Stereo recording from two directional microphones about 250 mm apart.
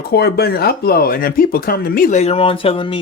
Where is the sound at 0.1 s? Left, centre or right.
Left.